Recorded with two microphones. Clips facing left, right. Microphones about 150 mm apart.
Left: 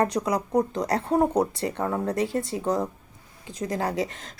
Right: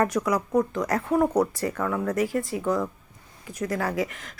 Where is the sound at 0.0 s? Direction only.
30° left (ahead or behind).